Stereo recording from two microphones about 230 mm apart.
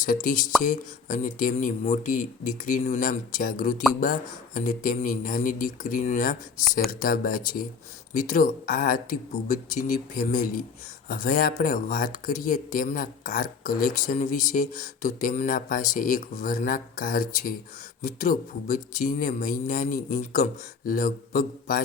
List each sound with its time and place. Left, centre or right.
0.0 s speech: left